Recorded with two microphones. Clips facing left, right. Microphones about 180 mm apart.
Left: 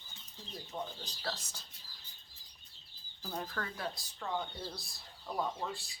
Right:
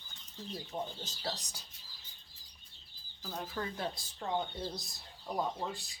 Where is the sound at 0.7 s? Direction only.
20° right (ahead or behind).